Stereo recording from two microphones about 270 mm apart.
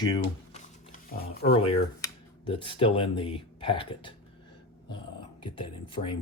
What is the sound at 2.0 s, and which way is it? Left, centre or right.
Speech, centre.